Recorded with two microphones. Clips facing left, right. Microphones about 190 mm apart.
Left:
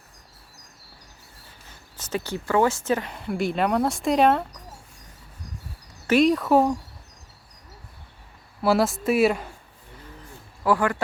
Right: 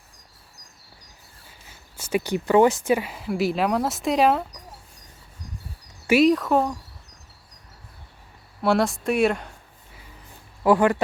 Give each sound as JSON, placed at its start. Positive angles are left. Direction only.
{"t": 2.0, "sound": "speech", "side_deg": -10}
{"t": 6.1, "sound": "speech", "side_deg": -5}
{"t": 8.6, "sound": "speech", "side_deg": 0}
{"t": 10.6, "sound": "speech", "side_deg": -20}